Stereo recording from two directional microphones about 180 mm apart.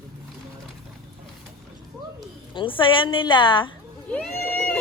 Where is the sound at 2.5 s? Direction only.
25° left (ahead or behind).